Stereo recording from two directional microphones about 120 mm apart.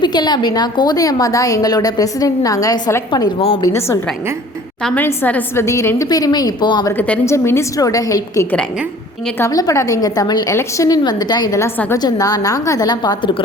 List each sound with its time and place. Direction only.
0.0 s a woman's voice: 35° left (ahead or behind)
6.9 s a woman's voice: 10° left (ahead or behind)
7.3 s a woman's voice: 20° left (ahead or behind); by 13.4 s 40° left (ahead or behind)